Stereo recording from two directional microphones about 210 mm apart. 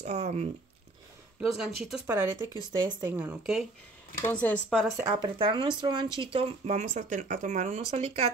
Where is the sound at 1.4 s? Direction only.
Centre (ahead or behind).